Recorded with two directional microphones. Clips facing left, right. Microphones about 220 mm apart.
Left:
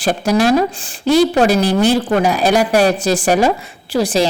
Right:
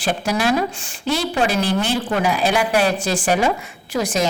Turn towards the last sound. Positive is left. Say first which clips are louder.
# left 5 dB
turn(degrees=30)  # may be behind; listen again after turning